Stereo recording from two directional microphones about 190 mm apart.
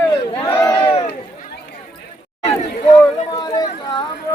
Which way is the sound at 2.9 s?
20° left (ahead or behind).